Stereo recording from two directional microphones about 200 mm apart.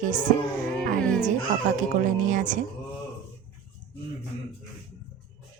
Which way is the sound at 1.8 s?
40° right (ahead or behind).